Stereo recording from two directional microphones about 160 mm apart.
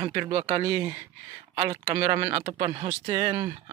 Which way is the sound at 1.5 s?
35° right (ahead or behind).